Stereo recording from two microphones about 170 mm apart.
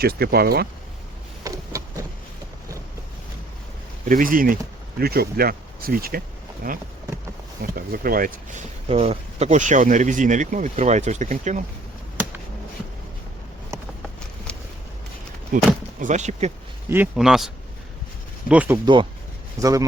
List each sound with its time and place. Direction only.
0.0 s speech: 65° right (ahead or behind)
4.1 s speech: 55° right (ahead or behind)
8.9 s speech: 40° right (ahead or behind)
14.5 s a sound: 5° left (ahead or behind)
15.5 s speech: 50° right (ahead or behind)
16.9 s a man's voice: 5° right (ahead or behind)
19.6 s speech: 20° right (ahead or behind)